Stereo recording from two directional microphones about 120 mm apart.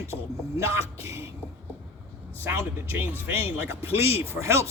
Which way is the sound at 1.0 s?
20° right (ahead or behind).